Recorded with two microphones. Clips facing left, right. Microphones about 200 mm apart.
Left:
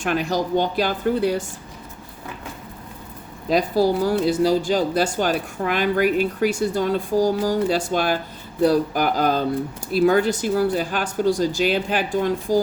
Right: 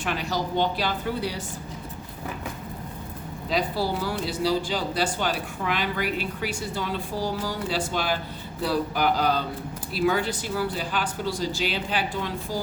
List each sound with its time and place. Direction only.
0.0 s speech: 45° left (ahead or behind)
3.5 s speech: 45° left (ahead or behind)